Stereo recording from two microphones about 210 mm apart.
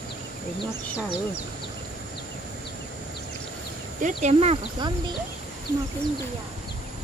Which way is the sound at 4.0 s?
35° right (ahead or behind).